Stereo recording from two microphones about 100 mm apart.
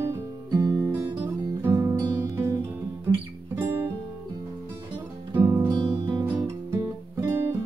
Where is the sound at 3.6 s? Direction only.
25° right (ahead or behind).